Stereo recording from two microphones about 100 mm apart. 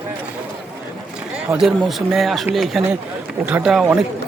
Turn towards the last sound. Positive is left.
turn(degrees=-5)  # may be behind; listen again after turning